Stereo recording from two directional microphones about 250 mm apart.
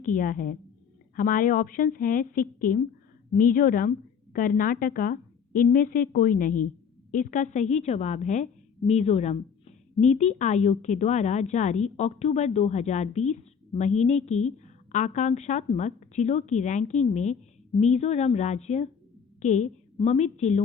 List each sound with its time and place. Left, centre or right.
0.0 s a woman's voice: left